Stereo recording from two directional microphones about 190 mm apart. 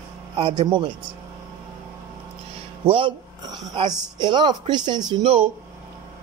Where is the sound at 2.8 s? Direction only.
25° right (ahead or behind).